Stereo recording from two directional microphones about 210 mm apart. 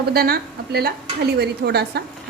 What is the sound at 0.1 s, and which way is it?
A woman's voice, 45° right (ahead or behind).